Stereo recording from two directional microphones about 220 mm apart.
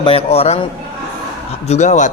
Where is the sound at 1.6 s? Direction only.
30° left (ahead or behind).